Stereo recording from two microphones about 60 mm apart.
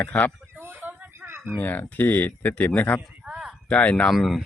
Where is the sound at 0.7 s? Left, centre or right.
Right.